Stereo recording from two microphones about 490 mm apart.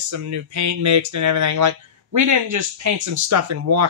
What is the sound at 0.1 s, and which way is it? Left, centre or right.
Speech, right.